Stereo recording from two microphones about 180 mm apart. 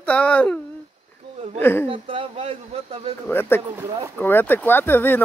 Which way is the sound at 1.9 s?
30° right (ahead or behind).